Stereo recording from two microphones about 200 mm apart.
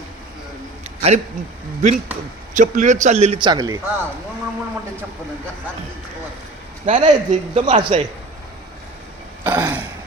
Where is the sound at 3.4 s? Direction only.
20° right (ahead or behind).